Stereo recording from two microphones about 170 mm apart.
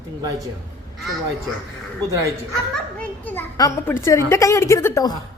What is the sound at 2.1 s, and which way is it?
Speech, 20° right (ahead or behind).